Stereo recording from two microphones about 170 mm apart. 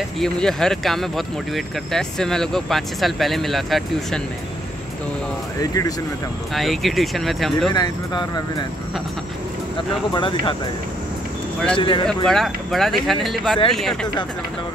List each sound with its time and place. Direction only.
0.2 s speech: 5° left (ahead or behind)
5.6 s speech: 20° left (ahead or behind)
6.5 s speech: centre (ahead or behind)
7.7 s speech: 25° left (ahead or behind)
10.1 s speech: 30° left (ahead or behind)
11.7 s speech: 30° left (ahead or behind)
12.3 s speech: centre (ahead or behind)